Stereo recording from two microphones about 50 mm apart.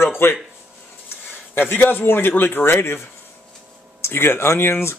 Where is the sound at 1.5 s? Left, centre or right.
Left.